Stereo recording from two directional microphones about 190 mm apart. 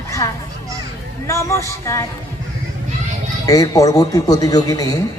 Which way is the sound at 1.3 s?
15° left (ahead or behind).